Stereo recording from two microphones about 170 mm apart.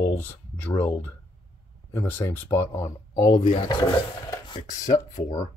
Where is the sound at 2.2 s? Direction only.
10° left (ahead or behind).